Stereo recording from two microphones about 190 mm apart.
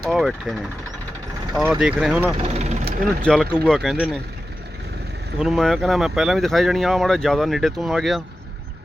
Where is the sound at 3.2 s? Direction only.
5° left (ahead or behind).